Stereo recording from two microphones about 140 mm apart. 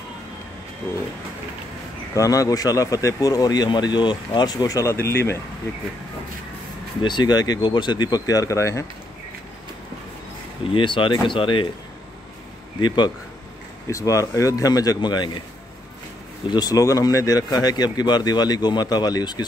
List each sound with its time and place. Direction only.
2.1 s speech: 25° left (ahead or behind)
7.0 s speech: 35° left (ahead or behind)
10.7 s speech: 35° left (ahead or behind)
12.8 s speech: 30° left (ahead or behind)
13.8 s speech: 20° left (ahead or behind)
16.4 s speech: 30° left (ahead or behind)